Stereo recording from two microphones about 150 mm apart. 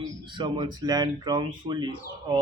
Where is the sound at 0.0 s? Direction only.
30° right (ahead or behind).